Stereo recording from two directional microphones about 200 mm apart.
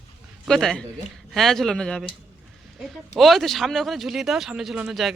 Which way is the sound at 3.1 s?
Centre (ahead or behind).